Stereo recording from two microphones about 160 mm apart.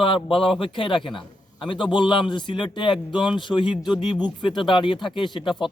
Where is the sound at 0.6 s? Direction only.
35° left (ahead or behind).